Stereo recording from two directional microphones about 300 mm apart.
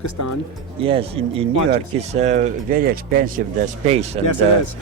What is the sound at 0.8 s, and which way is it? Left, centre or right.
Speech, centre.